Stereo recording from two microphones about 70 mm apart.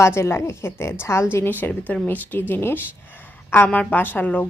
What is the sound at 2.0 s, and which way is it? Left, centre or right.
A woman's voice, left.